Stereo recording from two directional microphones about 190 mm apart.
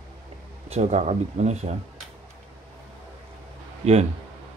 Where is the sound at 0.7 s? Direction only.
35° right (ahead or behind).